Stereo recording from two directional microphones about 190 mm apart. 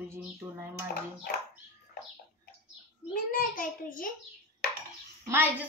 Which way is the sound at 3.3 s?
45° left (ahead or behind).